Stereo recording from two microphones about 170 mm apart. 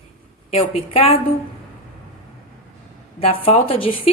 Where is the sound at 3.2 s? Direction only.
35° left (ahead or behind).